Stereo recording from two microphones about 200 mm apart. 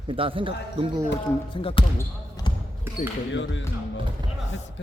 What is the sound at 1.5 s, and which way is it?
Speech, 25° left (ahead or behind).